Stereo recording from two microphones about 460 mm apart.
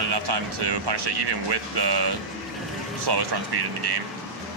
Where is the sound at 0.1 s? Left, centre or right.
Right.